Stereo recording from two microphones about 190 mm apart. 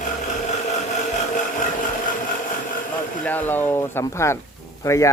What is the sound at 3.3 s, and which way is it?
Speech, 10° left (ahead or behind).